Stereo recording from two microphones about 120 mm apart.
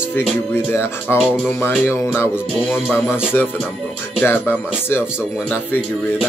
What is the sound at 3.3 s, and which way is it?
Speech, 15° left (ahead or behind).